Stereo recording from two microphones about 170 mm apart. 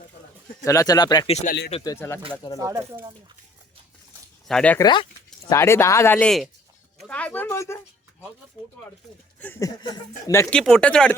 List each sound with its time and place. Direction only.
0.6 s speech: 20° left (ahead or behind)
1.3 s speech: 40° left (ahead or behind)
1.8 s speech: 20° left (ahead or behind)
2.6 s speech: 20° right (ahead or behind)
4.4 s speech: 5° left (ahead or behind)
4.8 s speech: 25° left (ahead or behind)
5.5 s speech: 15° left (ahead or behind)
9.4 s speech: 15° left (ahead or behind)
10.5 s speech: 5° left (ahead or behind)